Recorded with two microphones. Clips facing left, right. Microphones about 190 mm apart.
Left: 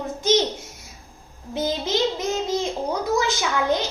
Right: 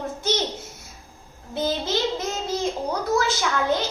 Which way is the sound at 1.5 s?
15° left (ahead or behind).